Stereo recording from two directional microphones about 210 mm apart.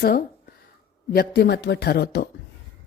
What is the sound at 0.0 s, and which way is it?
A woman's voice, 45° left (ahead or behind).